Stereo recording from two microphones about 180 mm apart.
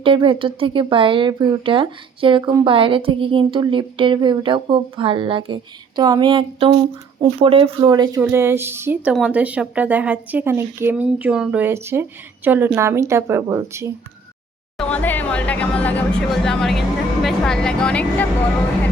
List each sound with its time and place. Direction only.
0.0 s speech: 30° right (ahead or behind)
14.8 s speech: 5° left (ahead or behind)